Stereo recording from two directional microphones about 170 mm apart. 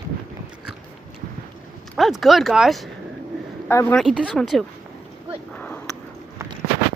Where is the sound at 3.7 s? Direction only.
15° left (ahead or behind).